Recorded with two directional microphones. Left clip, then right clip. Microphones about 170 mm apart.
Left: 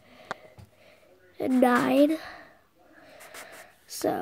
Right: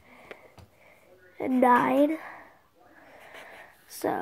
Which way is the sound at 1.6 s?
35° left (ahead or behind).